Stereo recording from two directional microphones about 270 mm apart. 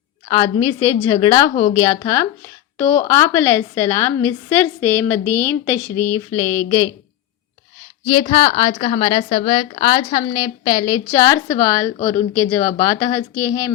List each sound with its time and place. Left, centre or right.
0.3 s a woman's voice: centre
8.1 s a woman's voice: centre